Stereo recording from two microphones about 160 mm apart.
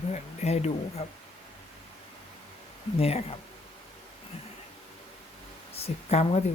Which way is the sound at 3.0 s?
40° left (ahead or behind).